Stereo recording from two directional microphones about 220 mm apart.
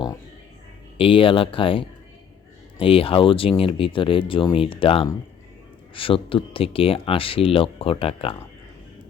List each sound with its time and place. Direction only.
0.9 s speech: 25° left (ahead or behind)